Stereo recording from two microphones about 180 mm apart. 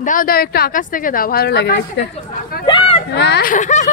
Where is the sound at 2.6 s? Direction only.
25° left (ahead or behind).